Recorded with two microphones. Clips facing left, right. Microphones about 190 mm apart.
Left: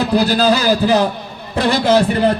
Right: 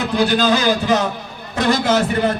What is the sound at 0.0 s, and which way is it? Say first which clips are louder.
A man's voice: left 3 dB; 35° left (ahead or behind).